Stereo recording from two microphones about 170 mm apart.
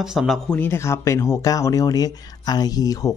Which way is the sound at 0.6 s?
15° left (ahead or behind).